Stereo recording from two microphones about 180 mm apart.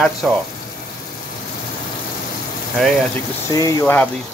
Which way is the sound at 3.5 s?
20° left (ahead or behind).